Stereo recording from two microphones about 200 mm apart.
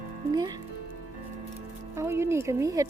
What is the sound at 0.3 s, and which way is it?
Speech, 20° right (ahead or behind).